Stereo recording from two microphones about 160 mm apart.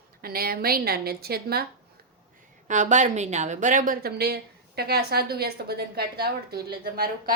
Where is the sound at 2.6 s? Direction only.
50° right (ahead or behind); by 7.1 s 70° right (ahead or behind).